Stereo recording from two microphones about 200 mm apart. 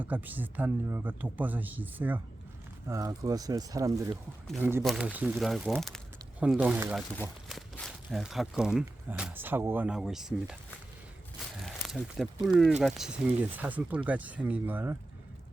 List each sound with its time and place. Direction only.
0.0 s speech: 10° right (ahead or behind)
4.8 s speech: centre (ahead or behind)
11.6 s a sound: centre (ahead or behind)
12.8 s speech: 5° right (ahead or behind)